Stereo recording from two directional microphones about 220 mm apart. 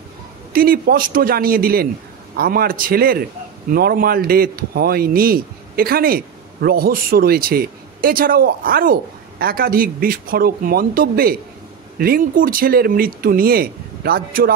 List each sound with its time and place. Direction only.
0.5 s a man's voice: 40° right (ahead or behind)